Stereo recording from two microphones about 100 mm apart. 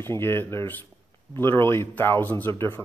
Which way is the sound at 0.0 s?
25° left (ahead or behind).